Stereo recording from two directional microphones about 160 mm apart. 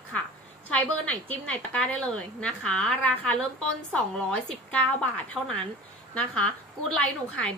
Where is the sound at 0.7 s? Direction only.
10° left (ahead or behind).